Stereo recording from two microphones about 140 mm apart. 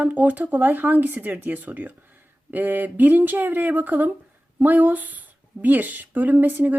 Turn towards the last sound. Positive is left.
turn(degrees=-10)  # may be behind; listen again after turning